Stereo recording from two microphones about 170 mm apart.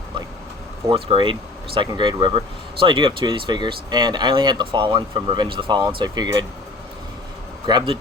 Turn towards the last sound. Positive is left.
turn(degrees=-30)  # may be behind; listen again after turning